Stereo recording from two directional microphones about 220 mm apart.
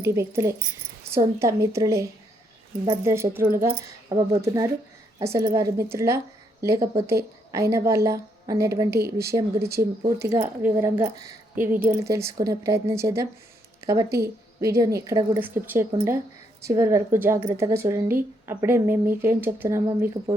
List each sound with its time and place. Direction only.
0.0 s speech: 10° right (ahead or behind)
9.0 s speech: 45° right (ahead or behind)
9.2 s speech: 15° right (ahead or behind)